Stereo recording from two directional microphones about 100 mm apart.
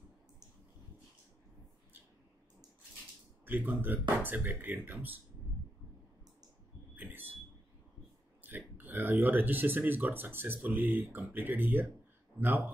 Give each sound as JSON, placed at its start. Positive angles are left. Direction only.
{"t": 3.4, "sound": "speech", "side_deg": -20}
{"t": 7.0, "sound": "a sound", "side_deg": -20}
{"t": 8.5, "sound": "speech", "side_deg": -20}